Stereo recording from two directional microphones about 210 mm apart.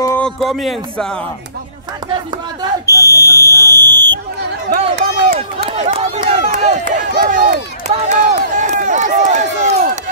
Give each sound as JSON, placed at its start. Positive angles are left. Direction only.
{"t": 0.0, "sound": "a sound", "side_deg": 10}
{"t": 0.4, "sound": "speech", "side_deg": 0}
{"t": 3.0, "sound": "speech", "side_deg": 15}
{"t": 4.6, "sound": "speech", "side_deg": -50}
{"t": 5.7, "sound": "run", "side_deg": -30}